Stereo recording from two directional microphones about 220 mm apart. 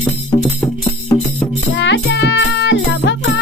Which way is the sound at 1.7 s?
55° left (ahead or behind).